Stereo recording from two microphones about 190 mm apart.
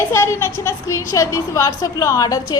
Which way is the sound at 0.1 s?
15° left (ahead or behind).